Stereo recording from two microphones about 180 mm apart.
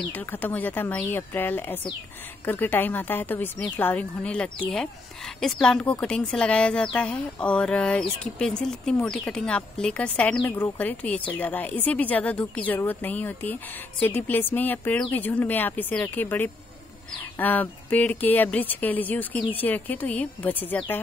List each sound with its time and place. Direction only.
0.1 s speech: 10° left (ahead or behind)